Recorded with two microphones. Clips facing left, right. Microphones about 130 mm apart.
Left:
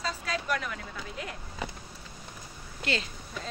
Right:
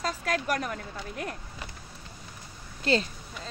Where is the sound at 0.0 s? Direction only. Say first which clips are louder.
Right 4 dB; 50° right (ahead or behind).